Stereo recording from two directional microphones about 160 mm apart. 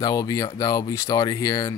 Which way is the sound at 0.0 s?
20° left (ahead or behind).